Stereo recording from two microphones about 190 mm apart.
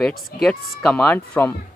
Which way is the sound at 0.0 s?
Centre (ahead or behind).